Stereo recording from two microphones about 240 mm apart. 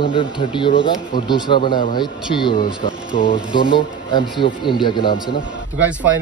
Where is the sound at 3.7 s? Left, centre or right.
Centre.